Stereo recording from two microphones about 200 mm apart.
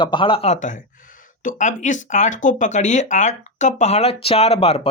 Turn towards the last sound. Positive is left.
turn(degrees=30)  # may be behind; listen again after turning